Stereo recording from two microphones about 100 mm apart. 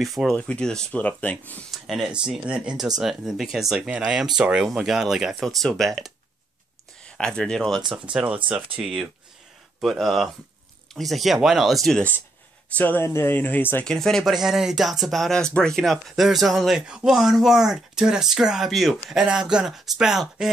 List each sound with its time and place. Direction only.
0.0 s speech: centre (ahead or behind)
0.4 s speech: 10° left (ahead or behind)
1.7 s speech: centre (ahead or behind)
7.9 s speech: 10° right (ahead or behind)
12.7 s speech: 20° left (ahead or behind)
13.8 s speech: 5° left (ahead or behind)